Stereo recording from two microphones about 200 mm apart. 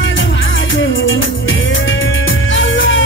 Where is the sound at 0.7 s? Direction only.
75° left (ahead or behind).